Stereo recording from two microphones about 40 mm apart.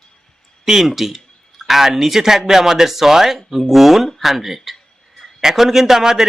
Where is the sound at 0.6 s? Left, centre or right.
Centre.